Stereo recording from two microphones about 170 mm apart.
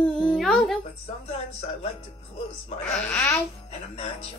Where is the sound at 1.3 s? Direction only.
35° left (ahead or behind).